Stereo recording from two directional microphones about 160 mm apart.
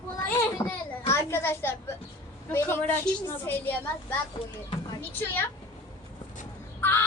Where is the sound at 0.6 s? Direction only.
15° left (ahead or behind).